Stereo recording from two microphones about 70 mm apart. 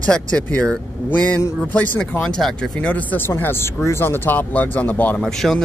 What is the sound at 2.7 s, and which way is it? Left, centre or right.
Speech, left.